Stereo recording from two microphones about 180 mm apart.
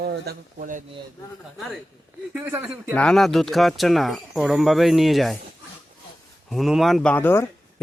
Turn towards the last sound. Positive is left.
turn(degrees=10)  # may be behind; listen again after turning